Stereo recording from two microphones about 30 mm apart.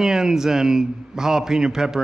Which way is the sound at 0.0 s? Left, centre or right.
Centre.